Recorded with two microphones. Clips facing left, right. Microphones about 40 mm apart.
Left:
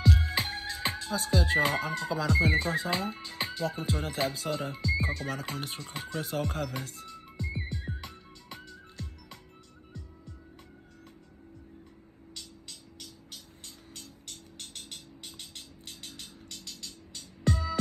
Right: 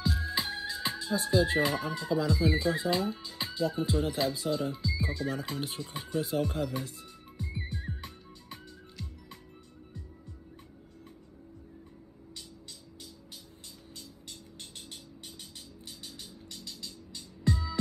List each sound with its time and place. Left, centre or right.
0.0 s music: left
1.5 s speech: left
12.4 s music: left
14.6 s music: left